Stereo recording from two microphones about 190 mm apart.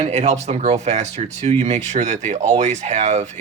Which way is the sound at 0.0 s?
35° right (ahead or behind).